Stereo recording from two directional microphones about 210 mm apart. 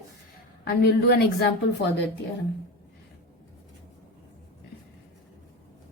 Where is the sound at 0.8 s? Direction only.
50° left (ahead or behind).